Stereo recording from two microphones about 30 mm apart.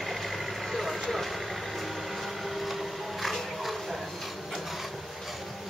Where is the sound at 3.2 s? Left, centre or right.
Centre.